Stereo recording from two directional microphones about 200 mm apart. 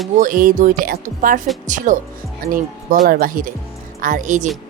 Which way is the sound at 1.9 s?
40° right (ahead or behind).